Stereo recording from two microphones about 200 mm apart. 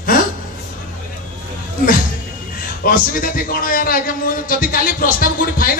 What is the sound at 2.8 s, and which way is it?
A man's voice, 45° left (ahead or behind).